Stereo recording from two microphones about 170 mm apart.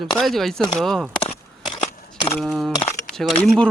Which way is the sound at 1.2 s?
30° left (ahead or behind).